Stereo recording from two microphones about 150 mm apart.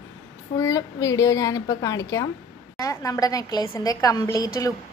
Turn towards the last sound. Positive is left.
turn(degrees=20)  # may be behind; listen again after turning